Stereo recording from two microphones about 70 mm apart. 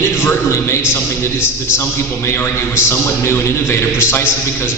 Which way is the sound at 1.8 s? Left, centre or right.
Left.